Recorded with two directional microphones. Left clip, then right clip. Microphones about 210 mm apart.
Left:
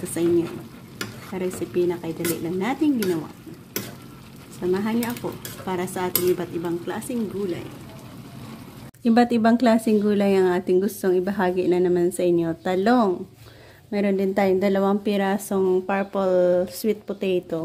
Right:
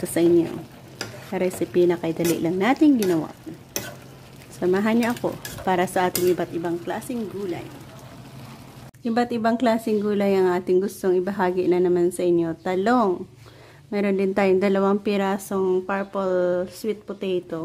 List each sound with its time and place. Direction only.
0.2 s speech: 20° right (ahead or behind)
4.6 s speech: 20° right (ahead or behind)
9.0 s speech: 5° left (ahead or behind)